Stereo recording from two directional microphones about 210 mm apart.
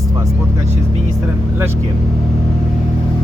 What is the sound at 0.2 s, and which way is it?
Vehicle, 15° right (ahead or behind).